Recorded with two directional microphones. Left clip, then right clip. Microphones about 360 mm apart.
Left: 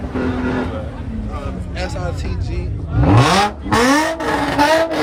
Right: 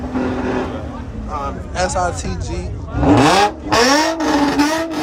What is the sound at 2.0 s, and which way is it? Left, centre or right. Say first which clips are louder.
Vehicle: right 7 dB; centre.